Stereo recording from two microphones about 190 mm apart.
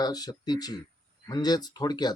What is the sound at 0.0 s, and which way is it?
Speech, 20° left (ahead or behind).